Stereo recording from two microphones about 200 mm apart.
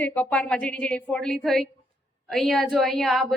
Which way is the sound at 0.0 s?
5° left (ahead or behind).